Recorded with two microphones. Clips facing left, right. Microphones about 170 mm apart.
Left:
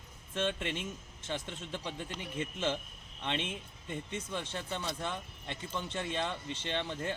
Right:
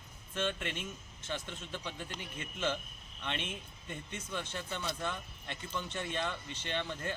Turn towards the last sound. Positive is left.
turn(degrees=25)  # may be behind; listen again after turning